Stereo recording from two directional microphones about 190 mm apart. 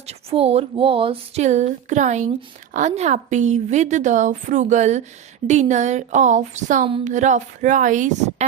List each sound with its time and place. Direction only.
0.1 s a woman's voice: 30° right (ahead or behind)